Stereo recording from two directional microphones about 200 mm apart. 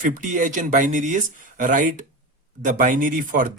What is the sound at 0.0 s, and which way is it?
Speech, 40° right (ahead or behind).